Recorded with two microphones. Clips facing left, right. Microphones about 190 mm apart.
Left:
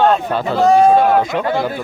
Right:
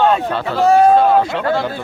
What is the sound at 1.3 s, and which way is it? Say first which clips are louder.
Speech: even; 15° left (ahead or behind).